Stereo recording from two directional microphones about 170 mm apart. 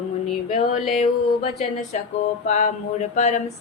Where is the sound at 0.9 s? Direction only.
40° left (ahead or behind).